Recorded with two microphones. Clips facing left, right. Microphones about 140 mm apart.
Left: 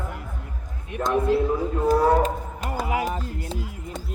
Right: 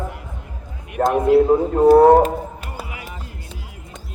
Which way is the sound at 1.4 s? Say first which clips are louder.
Right 9 dB; 50° right (ahead or behind).